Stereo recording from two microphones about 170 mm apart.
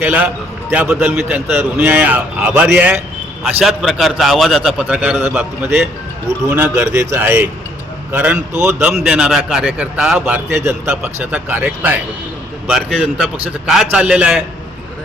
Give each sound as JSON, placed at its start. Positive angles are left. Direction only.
{"t": 0.0, "sound": "a man's voice", "side_deg": -10}
{"t": 6.5, "sound": "a man's voice", "side_deg": -15}